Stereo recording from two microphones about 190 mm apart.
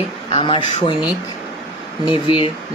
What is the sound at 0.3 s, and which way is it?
Speech, 25° left (ahead or behind).